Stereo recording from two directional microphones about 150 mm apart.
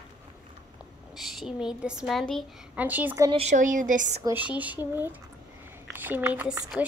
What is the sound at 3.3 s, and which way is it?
Speech, 50° right (ahead or behind).